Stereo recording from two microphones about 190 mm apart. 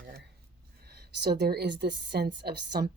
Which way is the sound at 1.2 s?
60° right (ahead or behind).